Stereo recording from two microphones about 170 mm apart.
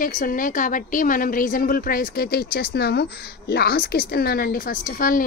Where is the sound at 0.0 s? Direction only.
55° left (ahead or behind).